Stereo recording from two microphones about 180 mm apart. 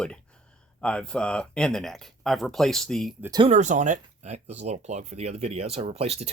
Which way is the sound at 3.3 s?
35° right (ahead or behind).